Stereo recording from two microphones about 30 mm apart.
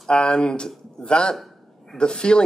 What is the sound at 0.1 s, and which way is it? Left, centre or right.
Speech, left.